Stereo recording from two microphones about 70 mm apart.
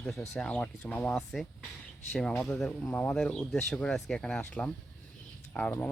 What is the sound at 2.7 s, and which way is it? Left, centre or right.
Speech, left.